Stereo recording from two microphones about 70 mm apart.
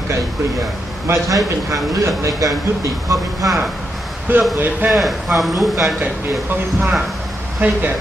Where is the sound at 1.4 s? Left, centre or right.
Right.